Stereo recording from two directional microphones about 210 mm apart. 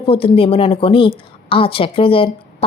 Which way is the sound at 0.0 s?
25° left (ahead or behind).